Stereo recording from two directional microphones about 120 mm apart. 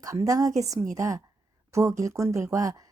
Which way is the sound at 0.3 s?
30° right (ahead or behind).